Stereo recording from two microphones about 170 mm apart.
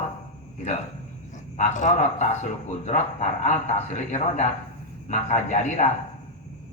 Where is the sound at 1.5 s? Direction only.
45° left (ahead or behind).